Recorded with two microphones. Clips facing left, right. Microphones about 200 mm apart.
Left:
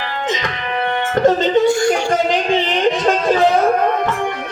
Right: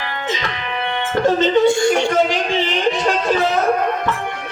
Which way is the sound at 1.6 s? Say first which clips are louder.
Even; 25° right (ahead or behind).